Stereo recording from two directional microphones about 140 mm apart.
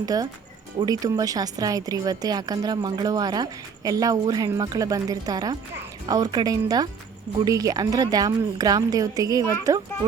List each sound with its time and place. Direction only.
0.0 s speech: 25° right (ahead or behind)